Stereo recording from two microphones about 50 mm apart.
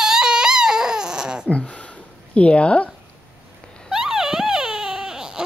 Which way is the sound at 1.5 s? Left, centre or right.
Left.